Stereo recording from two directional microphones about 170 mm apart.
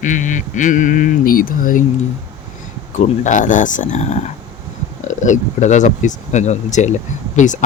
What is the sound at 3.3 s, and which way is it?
Speech, 50° left (ahead or behind).